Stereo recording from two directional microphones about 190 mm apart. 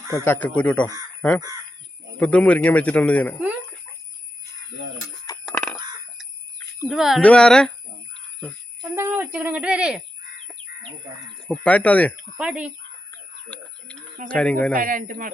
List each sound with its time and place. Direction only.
0.1 s a man's voice: 10° left (ahead or behind)
2.1 s a man's voice: 5° left (ahead or behind)
5.5 s a sound: 5° left (ahead or behind)
6.8 s speech: centre (ahead or behind)
8.4 s jingle bell: 5° left (ahead or behind)
9.0 s speech: 10° right (ahead or behind)
11.4 s a man's voice: 5° left (ahead or behind)
12.4 s speech: 5° right (ahead or behind)
13.5 s a man's voice: 5° left (ahead or behind)
14.7 s a man's voice: 45° right (ahead or behind)